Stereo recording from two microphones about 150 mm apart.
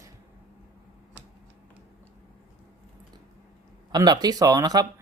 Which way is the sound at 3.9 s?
25° right (ahead or behind).